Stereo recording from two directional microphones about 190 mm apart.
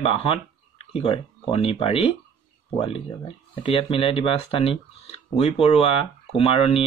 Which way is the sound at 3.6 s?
30° left (ahead or behind).